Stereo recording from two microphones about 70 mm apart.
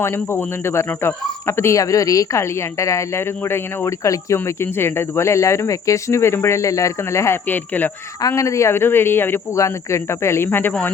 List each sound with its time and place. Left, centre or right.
0.0 s speech: left
2.4 s speech: left
7.4 s speech: left
8.4 s speech: left
9.6 s speech: left